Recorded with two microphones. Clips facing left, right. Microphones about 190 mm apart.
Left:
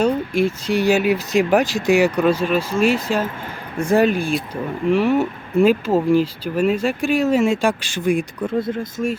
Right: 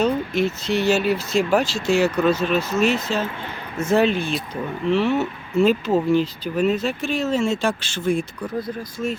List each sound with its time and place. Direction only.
0.0 s speech: 10° left (ahead or behind)